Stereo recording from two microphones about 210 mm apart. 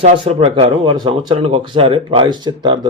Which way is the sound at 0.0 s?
30° right (ahead or behind).